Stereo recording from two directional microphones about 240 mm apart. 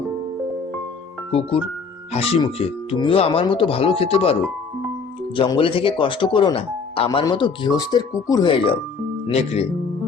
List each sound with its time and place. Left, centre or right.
1.3 s speech: left
5.4 s speech: left